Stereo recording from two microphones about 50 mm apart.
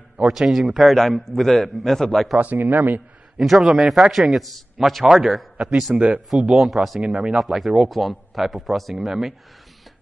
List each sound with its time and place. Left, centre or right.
0.2 s a man's voice: centre
2.3 s speech: right
3.3 s a man's voice: centre
5.0 s speech: centre
5.9 s speech: right
6.3 s a man's voice: centre